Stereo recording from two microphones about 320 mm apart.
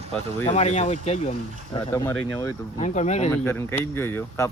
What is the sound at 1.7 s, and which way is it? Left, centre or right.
Speech, centre.